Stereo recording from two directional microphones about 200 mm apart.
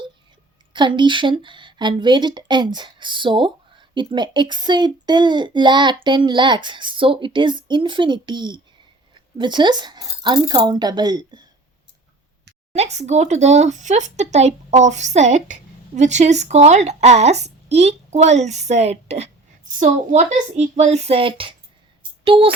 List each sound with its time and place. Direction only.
0.7 s speech: 25° right (ahead or behind)
12.7 s speech: 35° right (ahead or behind)